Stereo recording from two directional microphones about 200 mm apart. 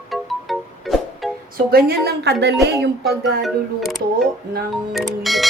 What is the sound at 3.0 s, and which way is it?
Speech, centre (ahead or behind).